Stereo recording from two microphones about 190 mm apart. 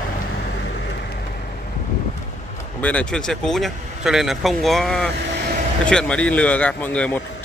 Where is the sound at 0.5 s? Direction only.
65° left (ahead or behind).